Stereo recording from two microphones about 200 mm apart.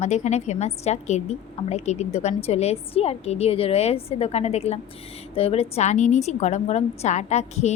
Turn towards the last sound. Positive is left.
turn(degrees=35)  # may be behind; listen again after turning